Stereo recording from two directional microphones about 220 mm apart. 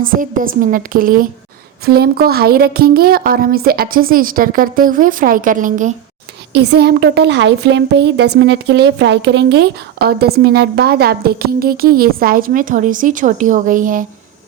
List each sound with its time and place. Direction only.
0.0 s speech: 40° right (ahead or behind)
6.5 s a woman's voice: 50° right (ahead or behind)